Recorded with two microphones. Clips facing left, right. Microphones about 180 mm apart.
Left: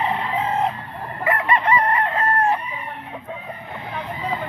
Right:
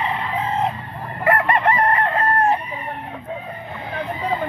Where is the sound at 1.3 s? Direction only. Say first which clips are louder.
Right 2 dB; 50° right (ahead or behind).